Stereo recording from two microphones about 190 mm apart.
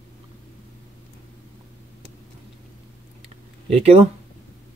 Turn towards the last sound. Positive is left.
turn(degrees=-30)  # may be behind; listen again after turning